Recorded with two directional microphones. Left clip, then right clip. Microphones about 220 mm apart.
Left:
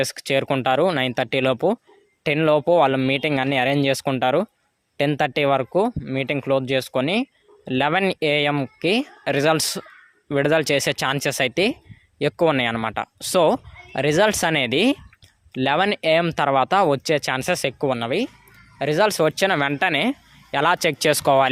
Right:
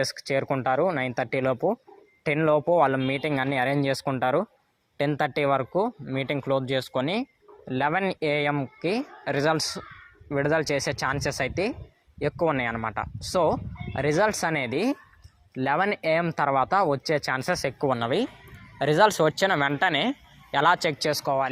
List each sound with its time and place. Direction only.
0.0 s speech: 35° left (ahead or behind)
21.2 s speech: 45° left (ahead or behind)